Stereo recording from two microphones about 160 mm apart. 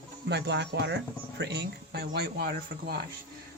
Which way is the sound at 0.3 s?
90° right.